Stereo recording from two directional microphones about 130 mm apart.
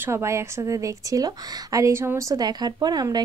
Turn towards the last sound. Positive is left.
turn(degrees=-30)  # may be behind; listen again after turning